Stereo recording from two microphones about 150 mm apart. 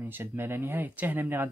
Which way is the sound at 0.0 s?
15° right (ahead or behind).